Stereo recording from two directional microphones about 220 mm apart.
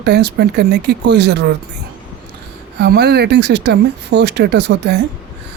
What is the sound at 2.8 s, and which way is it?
Speech, 50° right (ahead or behind).